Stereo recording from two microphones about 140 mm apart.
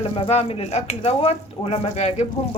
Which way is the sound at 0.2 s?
45° left (ahead or behind).